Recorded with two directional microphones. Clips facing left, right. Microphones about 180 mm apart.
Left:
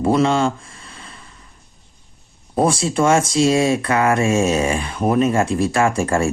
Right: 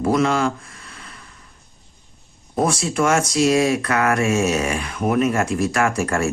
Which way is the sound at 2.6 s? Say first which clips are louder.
Left 3 dB; 30° left (ahead or behind).